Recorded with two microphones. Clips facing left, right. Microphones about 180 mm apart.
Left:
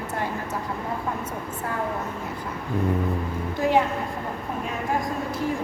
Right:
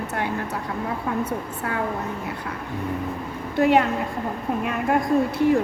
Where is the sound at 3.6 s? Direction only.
65° right (ahead or behind).